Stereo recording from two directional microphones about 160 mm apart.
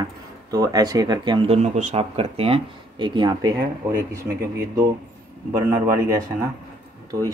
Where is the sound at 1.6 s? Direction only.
45° right (ahead or behind); by 3.5 s 30° right (ahead or behind).